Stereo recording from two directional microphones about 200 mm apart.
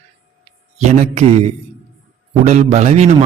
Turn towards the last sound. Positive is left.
turn(degrees=-35)  # may be behind; listen again after turning